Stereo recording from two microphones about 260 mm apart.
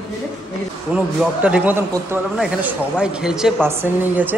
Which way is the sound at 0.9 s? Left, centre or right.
Centre.